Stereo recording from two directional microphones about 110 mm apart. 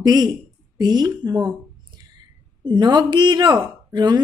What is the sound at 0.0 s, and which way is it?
Speech, 35° right (ahead or behind).